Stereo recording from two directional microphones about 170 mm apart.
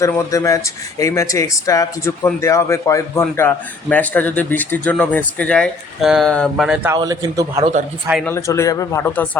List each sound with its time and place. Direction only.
0.0 s speech: 15° left (ahead or behind)
6.9 s a man's voice: 20° right (ahead or behind)
8.2 s speech: 15° left (ahead or behind)